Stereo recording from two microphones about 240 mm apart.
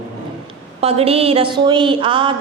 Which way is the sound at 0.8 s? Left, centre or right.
Right.